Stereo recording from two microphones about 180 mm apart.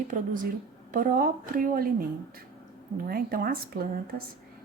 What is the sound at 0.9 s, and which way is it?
Speech, 50° right (ahead or behind).